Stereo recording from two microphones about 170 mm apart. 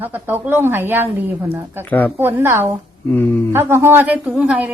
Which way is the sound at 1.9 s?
10° left (ahead or behind).